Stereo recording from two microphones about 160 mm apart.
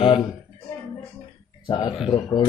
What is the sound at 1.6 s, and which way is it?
Speech, 20° left (ahead or behind).